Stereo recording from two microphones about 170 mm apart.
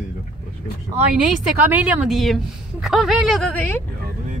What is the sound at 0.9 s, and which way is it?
A woman's voice, 10° right (ahead or behind).